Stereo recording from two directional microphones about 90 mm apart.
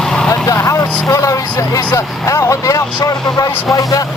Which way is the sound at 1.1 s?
40° left (ahead or behind).